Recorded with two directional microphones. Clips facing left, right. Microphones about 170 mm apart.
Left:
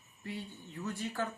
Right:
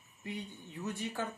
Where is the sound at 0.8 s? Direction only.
20° right (ahead or behind).